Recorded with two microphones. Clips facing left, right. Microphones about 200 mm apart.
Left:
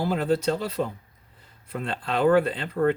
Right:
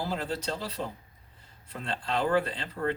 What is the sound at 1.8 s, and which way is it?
Speech, 55° left (ahead or behind).